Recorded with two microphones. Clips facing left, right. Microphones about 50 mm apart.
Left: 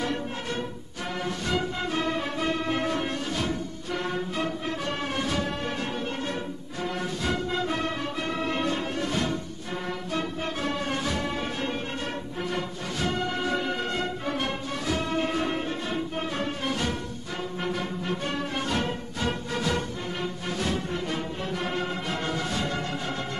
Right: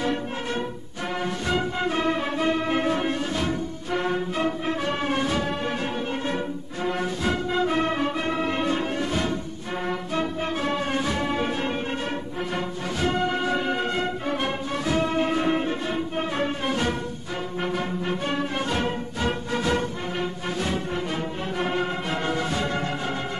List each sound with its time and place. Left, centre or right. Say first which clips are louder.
1.2 s music: right 2 dB; right
6.8 s music: right 4 dB; right
13.0 s music: right 4 dB; right